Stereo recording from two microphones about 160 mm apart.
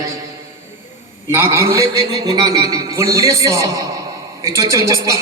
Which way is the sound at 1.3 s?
20° right (ahead or behind).